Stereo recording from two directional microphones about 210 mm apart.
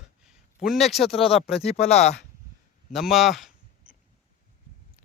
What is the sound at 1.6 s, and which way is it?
Speech, 30° left (ahead or behind).